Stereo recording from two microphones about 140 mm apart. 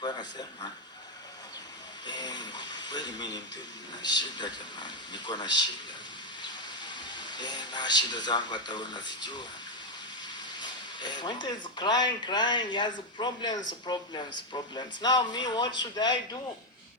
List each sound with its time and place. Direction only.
0.0 s speech: 30° left (ahead or behind)
2.0 s speech: 30° left (ahead or behind)
6.8 s speech: 35° left (ahead or behind)
10.6 s speech: 35° left (ahead or behind)